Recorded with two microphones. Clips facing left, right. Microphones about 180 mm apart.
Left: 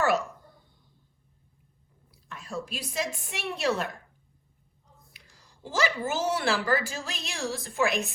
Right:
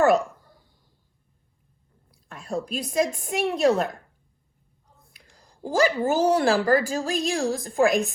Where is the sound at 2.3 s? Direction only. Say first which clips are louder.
Right 7 dB; 35° right (ahead or behind).